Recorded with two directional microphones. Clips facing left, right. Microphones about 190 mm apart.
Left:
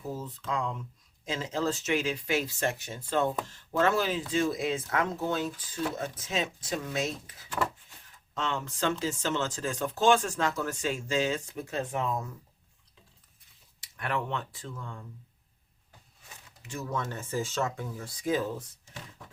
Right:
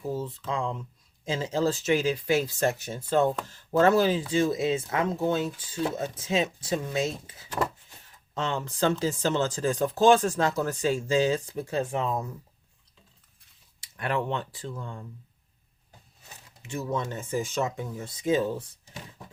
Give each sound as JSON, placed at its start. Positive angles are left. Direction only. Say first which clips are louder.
{"t": 0.0, "sound": "speech", "louder": "right 5 dB", "side_deg": -30}
{"t": 13.8, "sound": "speech", "louder": "right 4 dB", "side_deg": -30}
{"t": 16.6, "sound": "speech", "louder": "right 4 dB", "side_deg": -25}